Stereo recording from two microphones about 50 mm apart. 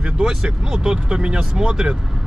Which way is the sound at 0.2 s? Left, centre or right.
Centre.